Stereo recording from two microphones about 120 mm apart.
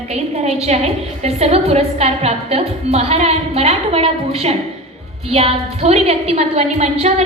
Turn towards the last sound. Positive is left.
turn(degrees=-70)  # may be behind; listen again after turning